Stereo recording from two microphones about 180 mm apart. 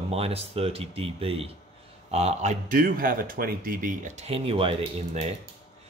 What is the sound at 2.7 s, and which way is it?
Speech, 50° right (ahead or behind).